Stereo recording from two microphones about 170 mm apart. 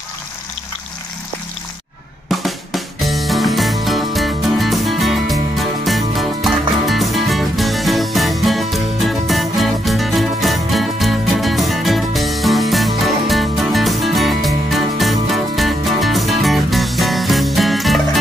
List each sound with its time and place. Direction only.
2.2 s music: centre (ahead or behind)